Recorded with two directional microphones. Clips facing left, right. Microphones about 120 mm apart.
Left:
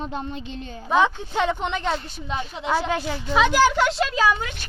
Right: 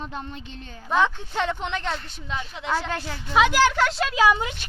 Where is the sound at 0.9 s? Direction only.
10° left (ahead or behind).